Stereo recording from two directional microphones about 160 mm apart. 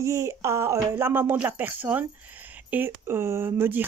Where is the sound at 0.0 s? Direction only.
20° right (ahead or behind).